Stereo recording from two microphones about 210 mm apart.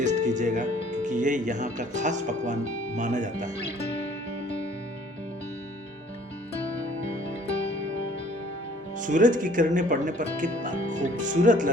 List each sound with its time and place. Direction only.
0.0 s speech: 35° right (ahead or behind)
9.0 s speech: 40° right (ahead or behind)